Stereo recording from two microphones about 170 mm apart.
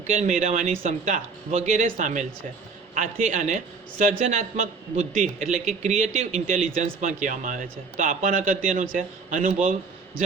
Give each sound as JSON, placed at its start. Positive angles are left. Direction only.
{"t": 0.1, "sound": "a man's voice", "side_deg": -45}